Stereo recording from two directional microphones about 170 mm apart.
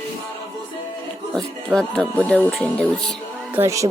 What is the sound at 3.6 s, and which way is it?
Speech, 20° right (ahead or behind).